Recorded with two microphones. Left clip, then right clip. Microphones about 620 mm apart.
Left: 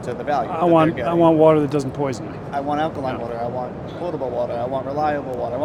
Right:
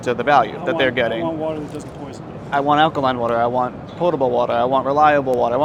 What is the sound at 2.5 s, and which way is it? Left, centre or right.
Speech, right.